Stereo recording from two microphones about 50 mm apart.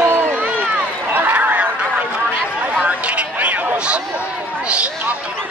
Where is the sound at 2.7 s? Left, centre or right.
Right.